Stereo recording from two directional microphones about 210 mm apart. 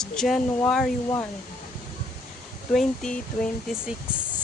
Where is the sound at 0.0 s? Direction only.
Centre (ahead or behind).